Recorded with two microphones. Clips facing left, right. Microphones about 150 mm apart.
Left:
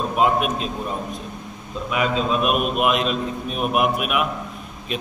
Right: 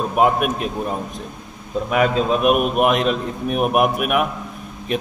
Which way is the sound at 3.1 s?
65° right (ahead or behind).